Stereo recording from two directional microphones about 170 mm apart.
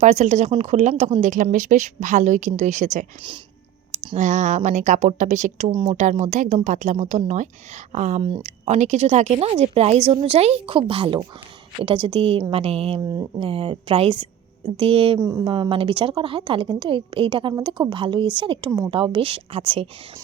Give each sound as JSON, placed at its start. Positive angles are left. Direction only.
{"t": 0.0, "sound": "speech", "side_deg": -45}
{"t": 3.9, "sound": "a woman's voice", "side_deg": -35}
{"t": 15.2, "sound": "a woman's voice", "side_deg": -20}